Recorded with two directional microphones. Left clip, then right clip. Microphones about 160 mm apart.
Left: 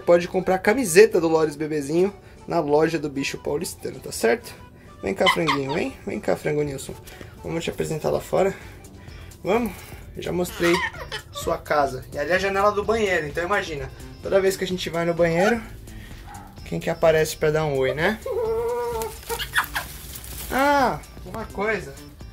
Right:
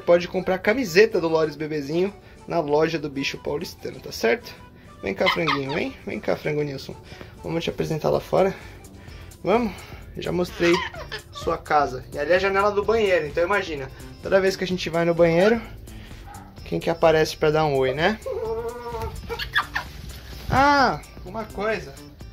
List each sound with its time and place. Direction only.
0.0 s speech: 5° left (ahead or behind)
7.4 s speech: 20° right (ahead or behind)
10.7 s speech: 40° right (ahead or behind)
11.3 s speech: 10° right (ahead or behind)
14.3 s speech: 20° right (ahead or behind)
16.6 s speech: 20° right (ahead or behind)
20.5 s speech: 20° right (ahead or behind)
21.4 s speech: centre (ahead or behind)